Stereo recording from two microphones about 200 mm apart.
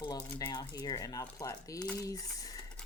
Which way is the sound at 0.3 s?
20° left (ahead or behind).